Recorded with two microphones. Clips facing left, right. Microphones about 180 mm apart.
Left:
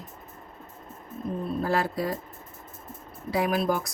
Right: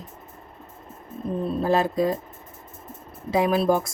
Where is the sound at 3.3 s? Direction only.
20° right (ahead or behind).